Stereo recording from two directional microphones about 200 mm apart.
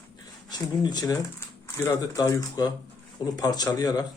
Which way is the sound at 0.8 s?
20° left (ahead or behind).